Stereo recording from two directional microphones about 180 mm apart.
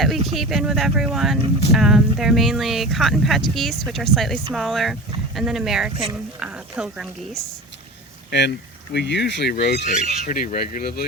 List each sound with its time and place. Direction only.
0.0 s speech: centre (ahead or behind)
8.3 s speech: 70° left (ahead or behind)
9.8 s speech: 40° left (ahead or behind)